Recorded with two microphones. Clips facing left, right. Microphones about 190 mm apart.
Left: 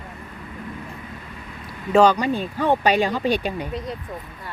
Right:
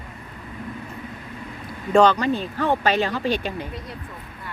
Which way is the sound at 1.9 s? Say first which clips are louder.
Even; 10° left (ahead or behind).